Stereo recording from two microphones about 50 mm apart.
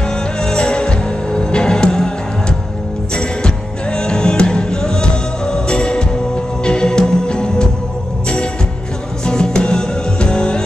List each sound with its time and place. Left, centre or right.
0.4 s music: centre
3.2 s music: centre
9.2 s music: centre